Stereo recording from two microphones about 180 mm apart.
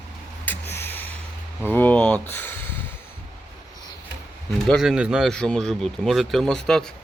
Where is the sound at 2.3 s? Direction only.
10° left (ahead or behind).